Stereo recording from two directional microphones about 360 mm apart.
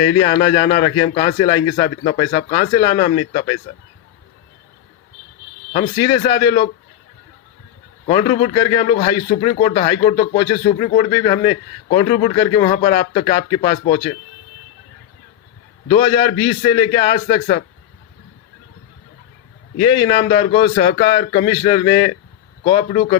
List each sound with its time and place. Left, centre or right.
0.0 s speech: centre
5.7 s speech: centre
8.0 s speech: centre
15.9 s speech: centre
19.8 s speech: centre